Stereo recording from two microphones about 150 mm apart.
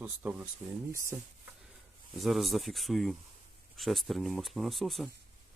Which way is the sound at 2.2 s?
Centre (ahead or behind).